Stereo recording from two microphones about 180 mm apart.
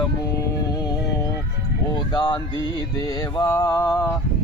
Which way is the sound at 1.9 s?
25° left (ahead or behind).